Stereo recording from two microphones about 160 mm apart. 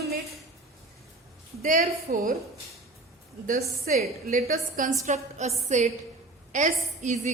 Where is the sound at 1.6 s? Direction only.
60° right (ahead or behind).